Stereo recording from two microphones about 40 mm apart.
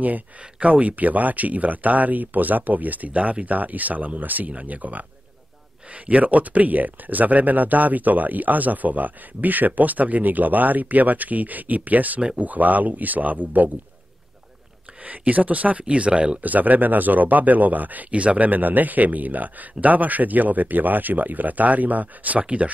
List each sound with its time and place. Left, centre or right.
0.4 s speech: right
15.0 s speech: right
16.4 s speech: right